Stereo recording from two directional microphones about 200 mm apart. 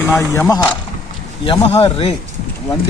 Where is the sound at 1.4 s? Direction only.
25° left (ahead or behind).